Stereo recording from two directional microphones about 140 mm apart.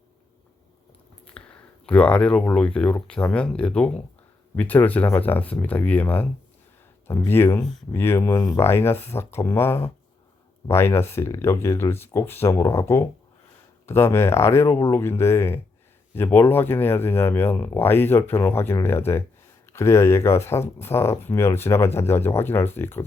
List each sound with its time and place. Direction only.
1.4 s a sound: 5° left (ahead or behind)
1.9 s speech: 5° left (ahead or behind)
7.3 s speech: 15° left (ahead or behind)